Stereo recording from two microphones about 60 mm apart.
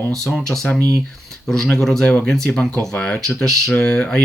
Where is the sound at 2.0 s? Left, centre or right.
Centre.